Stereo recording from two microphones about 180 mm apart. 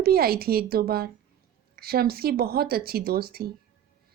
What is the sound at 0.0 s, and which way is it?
A woman's voice, 60° right (ahead or behind).